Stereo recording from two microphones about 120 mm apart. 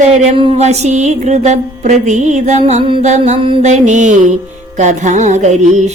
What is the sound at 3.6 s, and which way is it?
Mantra, 85° right.